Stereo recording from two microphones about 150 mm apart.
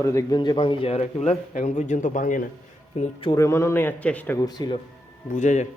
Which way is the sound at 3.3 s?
20° left (ahead or behind).